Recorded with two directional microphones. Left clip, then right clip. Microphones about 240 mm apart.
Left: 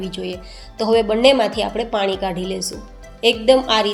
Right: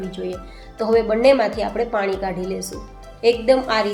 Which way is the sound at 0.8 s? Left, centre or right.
Left.